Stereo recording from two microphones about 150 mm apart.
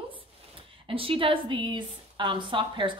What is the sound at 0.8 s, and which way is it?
A woman's voice, 35° right (ahead or behind).